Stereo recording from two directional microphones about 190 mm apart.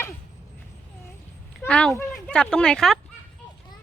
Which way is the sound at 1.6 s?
5° left (ahead or behind).